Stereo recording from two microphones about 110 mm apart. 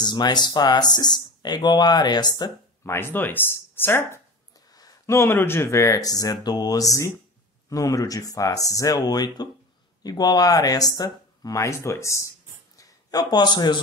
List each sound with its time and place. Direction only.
0.0 s speech: 40° left (ahead or behind)
2.8 s speech: 20° left (ahead or behind)
4.6 s a man's voice: 35° left (ahead or behind)